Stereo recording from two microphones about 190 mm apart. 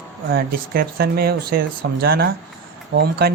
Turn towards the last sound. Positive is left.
turn(degrees=-55)  # may be behind; listen again after turning